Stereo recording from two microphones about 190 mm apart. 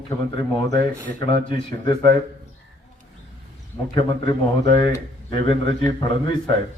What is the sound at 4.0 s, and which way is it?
A man's voice, 25° left (ahead or behind).